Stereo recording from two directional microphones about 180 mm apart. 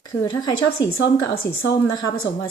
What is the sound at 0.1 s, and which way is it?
A woman's voice, 25° left (ahead or behind).